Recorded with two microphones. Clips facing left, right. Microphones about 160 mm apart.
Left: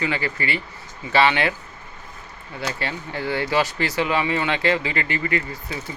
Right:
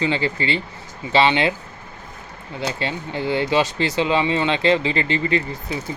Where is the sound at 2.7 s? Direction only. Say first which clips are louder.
Right 2 dB; 20° right (ahead or behind).